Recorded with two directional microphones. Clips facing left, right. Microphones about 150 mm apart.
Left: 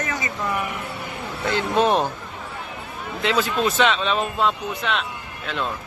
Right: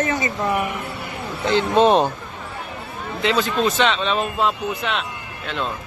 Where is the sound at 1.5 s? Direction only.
25° right (ahead or behind).